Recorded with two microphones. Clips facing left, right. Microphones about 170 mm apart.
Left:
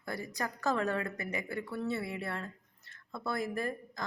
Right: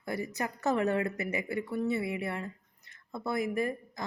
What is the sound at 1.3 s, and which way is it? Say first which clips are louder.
Speech: right 4 dB; 5° right (ahead or behind).